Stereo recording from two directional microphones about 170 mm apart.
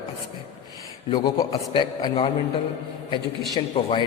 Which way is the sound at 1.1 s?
25° left (ahead or behind).